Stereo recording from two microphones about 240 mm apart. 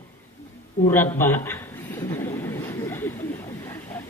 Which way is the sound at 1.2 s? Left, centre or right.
Centre.